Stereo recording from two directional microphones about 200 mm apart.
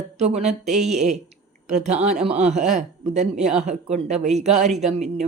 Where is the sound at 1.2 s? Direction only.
35° right (ahead or behind).